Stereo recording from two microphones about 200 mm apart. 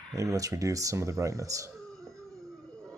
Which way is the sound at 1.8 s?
Centre (ahead or behind).